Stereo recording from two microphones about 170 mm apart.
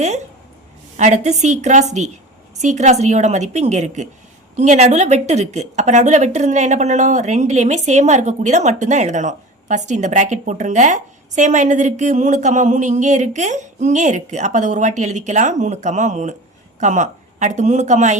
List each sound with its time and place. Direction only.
0.9 s a woman's voice: 45° right (ahead or behind)